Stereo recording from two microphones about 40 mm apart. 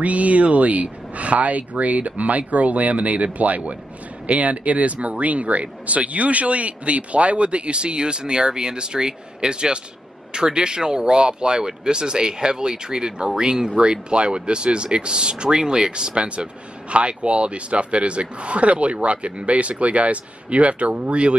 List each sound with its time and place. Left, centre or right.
0.0 s speech: right